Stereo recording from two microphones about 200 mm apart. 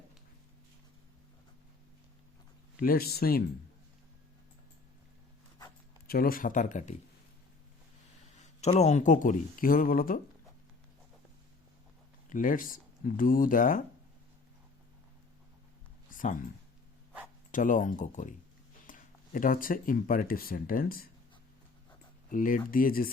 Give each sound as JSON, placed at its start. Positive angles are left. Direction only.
{"t": 2.7, "sound": "speech", "side_deg": 45}
{"t": 6.1, "sound": "speech", "side_deg": 45}
{"t": 8.4, "sound": "speech", "side_deg": 35}
{"t": 12.3, "sound": "speech", "side_deg": 40}
{"t": 16.0, "sound": "a sound", "side_deg": 40}
{"t": 17.5, "sound": "speech", "side_deg": 40}
{"t": 22.3, "sound": "speech", "side_deg": 40}